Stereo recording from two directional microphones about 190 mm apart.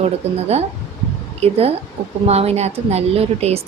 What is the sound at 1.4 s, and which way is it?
A woman's voice, 30° right (ahead or behind).